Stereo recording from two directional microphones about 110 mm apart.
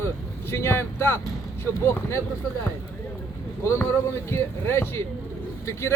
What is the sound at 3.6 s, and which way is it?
Speech, 25° left (ahead or behind).